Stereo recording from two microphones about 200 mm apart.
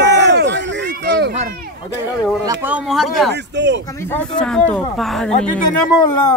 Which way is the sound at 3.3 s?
60° right (ahead or behind).